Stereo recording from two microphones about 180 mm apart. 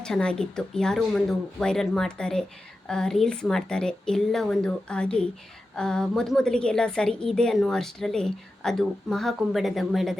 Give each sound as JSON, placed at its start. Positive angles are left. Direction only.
{"t": 0.0, "sound": "a woman's voice", "side_deg": 5}